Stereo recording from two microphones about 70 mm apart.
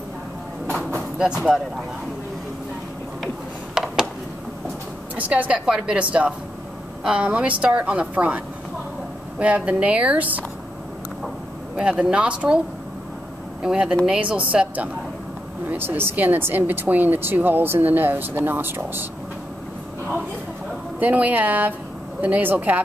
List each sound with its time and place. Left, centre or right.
1.1 s speech: centre
3.7 s a sound: centre
5.1 s speech: right
9.4 s speech: centre
11.7 s speech: centre
15.7 s speech: right
21.0 s speech: right